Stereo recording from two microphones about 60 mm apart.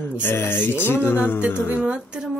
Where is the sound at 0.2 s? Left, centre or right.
Left.